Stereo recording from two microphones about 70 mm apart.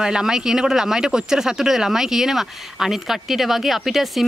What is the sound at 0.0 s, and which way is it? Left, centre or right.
Speech, centre.